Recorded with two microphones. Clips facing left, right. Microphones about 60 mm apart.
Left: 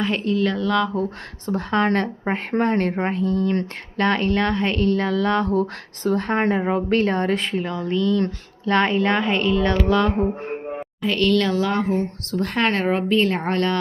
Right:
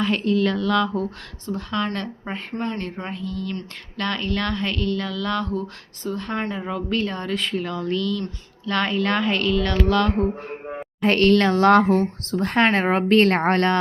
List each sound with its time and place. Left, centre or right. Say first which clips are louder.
0.0 s speech: even; centre
1.5 s speech: left 5 dB; left
2.5 s speech: left 8 dB; left
5.5 s speech: left 7 dB; left
7.6 s speech: left 2 dB; centre
11.0 s a woman's voice: right 3 dB; right
11.6 s speech: right 7 dB; right
12.3 s speech: right 2 dB; right
13.1 s a woman's voice: right 3 dB; right